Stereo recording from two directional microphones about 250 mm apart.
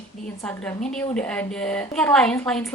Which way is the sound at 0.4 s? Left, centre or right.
Centre.